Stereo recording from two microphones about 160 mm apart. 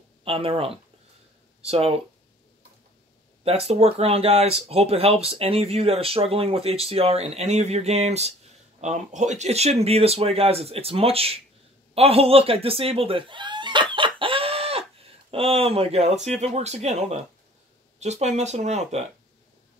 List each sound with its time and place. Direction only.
0.2 s speech: 35° right (ahead or behind)
3.4 s speech: 40° right (ahead or behind)
11.9 s chicken: 40° right (ahead or behind)
15.3 s speech: 35° right (ahead or behind)